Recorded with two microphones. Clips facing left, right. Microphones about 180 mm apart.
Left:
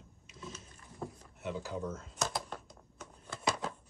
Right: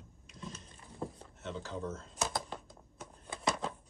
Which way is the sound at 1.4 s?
10° left (ahead or behind).